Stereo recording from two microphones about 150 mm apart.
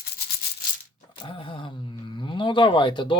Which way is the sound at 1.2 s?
35° left (ahead or behind).